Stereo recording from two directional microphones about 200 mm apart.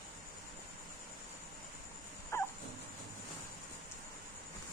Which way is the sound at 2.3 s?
15° left (ahead or behind).